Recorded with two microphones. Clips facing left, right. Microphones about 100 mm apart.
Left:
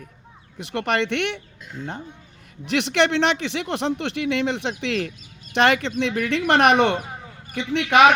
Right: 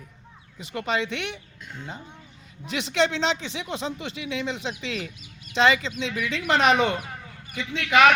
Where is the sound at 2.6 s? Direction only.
75° left (ahead or behind).